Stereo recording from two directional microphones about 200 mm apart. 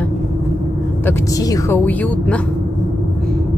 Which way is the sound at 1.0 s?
15° left (ahead or behind).